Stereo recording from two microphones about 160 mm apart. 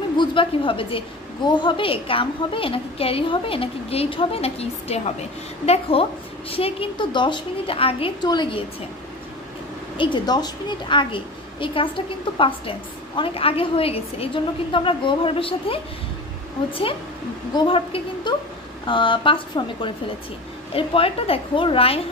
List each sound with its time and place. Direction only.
0.2 s a woman's voice: 30° left (ahead or behind)
9.9 s a woman's voice: 30° left (ahead or behind)
17.6 s a woman's voice: 35° left (ahead or behind)